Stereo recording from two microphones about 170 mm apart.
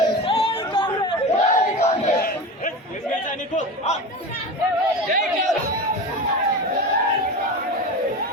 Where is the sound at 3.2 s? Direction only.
45° left (ahead or behind).